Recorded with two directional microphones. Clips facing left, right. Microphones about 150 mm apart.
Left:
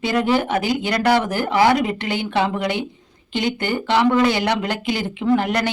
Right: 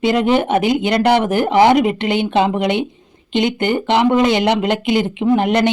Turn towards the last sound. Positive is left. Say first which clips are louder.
# right 4 dB
turn(degrees=-20)  # may be behind; listen again after turning